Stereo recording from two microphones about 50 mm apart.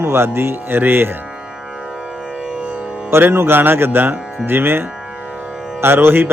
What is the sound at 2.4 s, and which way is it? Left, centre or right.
Music, right.